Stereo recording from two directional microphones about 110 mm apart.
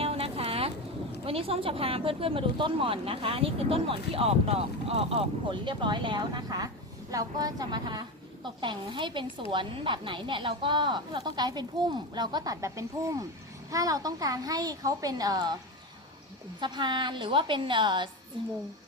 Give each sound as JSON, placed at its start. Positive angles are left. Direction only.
{"t": 0.0, "sound": "a sound", "side_deg": -60}
{"t": 1.2, "sound": "a woman's voice", "side_deg": -60}
{"t": 16.6, "sound": "a woman's voice", "side_deg": -45}